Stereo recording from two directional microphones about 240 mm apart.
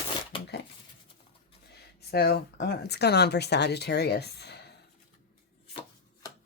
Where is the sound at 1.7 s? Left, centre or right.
Left.